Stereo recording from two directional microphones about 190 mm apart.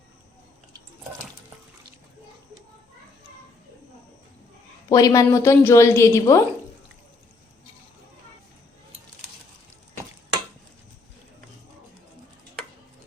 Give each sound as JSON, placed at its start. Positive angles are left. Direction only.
{"t": 4.9, "sound": "a woman's voice", "side_deg": 20}